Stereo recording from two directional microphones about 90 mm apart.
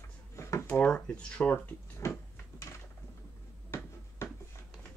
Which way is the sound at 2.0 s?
35° left (ahead or behind).